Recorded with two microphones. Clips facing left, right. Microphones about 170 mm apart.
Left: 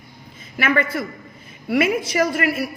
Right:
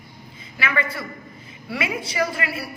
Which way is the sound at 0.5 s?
45° left (ahead or behind).